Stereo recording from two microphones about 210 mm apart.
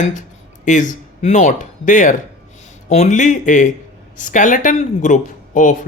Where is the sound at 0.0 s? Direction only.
35° left (ahead or behind).